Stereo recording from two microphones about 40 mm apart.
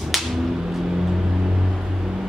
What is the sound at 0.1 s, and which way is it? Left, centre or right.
Music, centre.